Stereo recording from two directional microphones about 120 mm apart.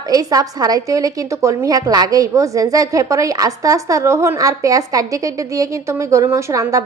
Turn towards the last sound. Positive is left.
turn(degrees=-25)  # may be behind; listen again after turning